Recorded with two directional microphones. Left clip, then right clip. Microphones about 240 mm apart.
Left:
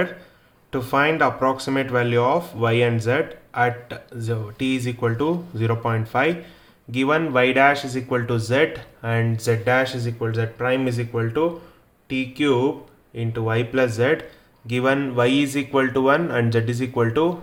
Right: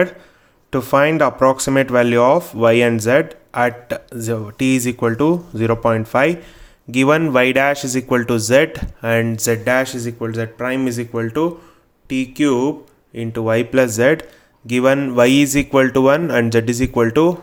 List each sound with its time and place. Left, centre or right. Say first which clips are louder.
0.7 s speech: right 5 dB; right